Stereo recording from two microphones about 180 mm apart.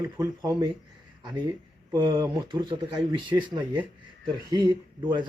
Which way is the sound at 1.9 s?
25° right (ahead or behind).